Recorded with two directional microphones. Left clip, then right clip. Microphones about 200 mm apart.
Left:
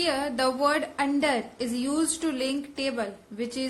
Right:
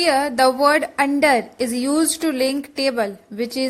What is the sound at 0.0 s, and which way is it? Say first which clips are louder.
A woman's voice: right 10 dB; 35° right (ahead or behind).